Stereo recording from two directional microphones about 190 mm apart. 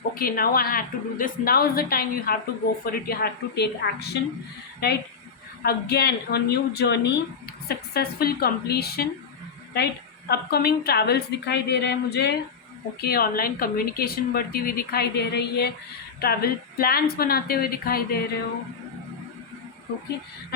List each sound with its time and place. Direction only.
0.1 s a woman's voice: 50° left (ahead or behind)